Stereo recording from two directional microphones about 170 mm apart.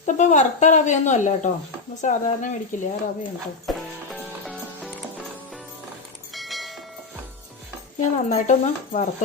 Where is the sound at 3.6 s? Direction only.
Centre (ahead or behind).